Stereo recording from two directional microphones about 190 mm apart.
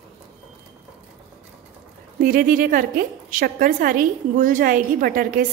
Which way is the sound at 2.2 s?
50° right (ahead or behind).